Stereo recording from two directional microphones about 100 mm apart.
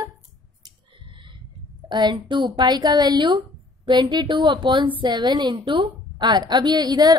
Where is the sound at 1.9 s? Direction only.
50° right (ahead or behind).